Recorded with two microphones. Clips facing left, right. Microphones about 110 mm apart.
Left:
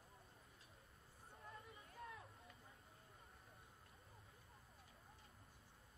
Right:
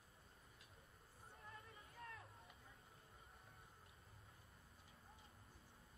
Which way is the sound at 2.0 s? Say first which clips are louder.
Left 2 dB; 5° left (ahead or behind).